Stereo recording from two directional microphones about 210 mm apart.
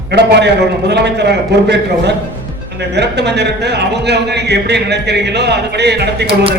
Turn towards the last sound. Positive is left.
turn(degrees=-50)  # may be behind; listen again after turning